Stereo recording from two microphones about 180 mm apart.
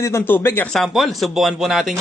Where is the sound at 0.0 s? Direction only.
15° left (ahead or behind).